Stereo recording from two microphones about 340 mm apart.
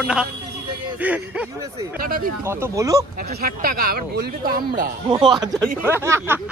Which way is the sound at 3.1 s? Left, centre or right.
Right.